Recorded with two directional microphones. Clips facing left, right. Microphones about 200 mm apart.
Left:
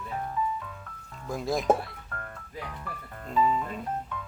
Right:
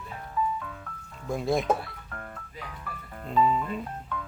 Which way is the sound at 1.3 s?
Centre (ahead or behind).